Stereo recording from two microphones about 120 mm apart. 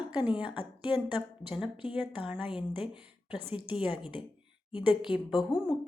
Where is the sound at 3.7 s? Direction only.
45° left (ahead or behind).